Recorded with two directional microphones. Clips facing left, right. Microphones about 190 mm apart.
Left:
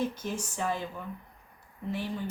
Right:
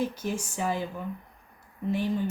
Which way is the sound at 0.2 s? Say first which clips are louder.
Right 3 dB; 10° right (ahead or behind).